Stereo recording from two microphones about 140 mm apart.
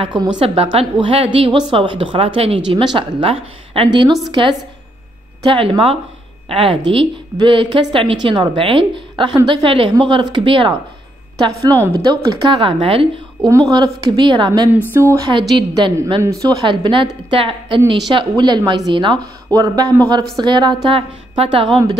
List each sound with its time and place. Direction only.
0.0 s speech: 30° right (ahead or behind)
0.4 s a woman's voice: 45° right (ahead or behind)
11.6 s speech: 25° right (ahead or behind); by 13.5 s 40° right (ahead or behind)
13.5 s speech: 25° right (ahead or behind)
16.2 s speech: 20° right (ahead or behind); by 21.6 s 40° right (ahead or behind)